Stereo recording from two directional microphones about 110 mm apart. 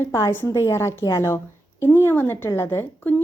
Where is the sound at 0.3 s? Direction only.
25° left (ahead or behind).